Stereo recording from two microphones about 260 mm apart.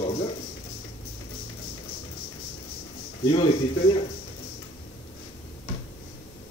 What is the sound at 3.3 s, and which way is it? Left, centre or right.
Speech, left.